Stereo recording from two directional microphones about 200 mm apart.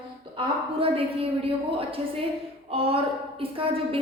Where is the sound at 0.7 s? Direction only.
30° right (ahead or behind).